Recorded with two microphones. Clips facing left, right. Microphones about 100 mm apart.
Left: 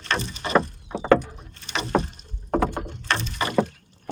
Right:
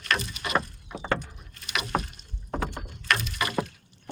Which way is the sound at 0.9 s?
30° left (ahead or behind).